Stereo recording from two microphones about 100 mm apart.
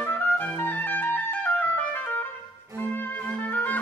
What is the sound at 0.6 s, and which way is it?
Clarinet, 20° left (ahead or behind).